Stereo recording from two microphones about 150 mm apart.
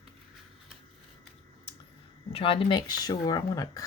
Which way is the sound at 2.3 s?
35° left (ahead or behind).